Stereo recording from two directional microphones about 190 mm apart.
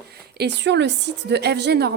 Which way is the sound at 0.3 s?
65° right (ahead or behind).